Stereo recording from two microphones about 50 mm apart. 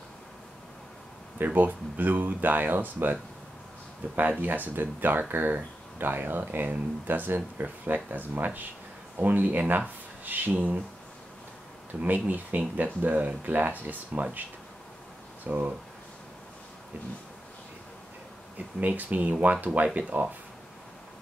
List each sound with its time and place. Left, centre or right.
1.4 s speech: right
12.0 s speech: right
15.4 s speech: right
18.8 s speech: right